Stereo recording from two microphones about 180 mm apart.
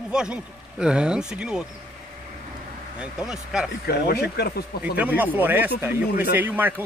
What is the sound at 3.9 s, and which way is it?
Speech, 65° left (ahead or behind).